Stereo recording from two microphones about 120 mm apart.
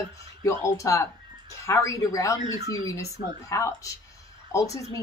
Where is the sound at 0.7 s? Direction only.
25° left (ahead or behind).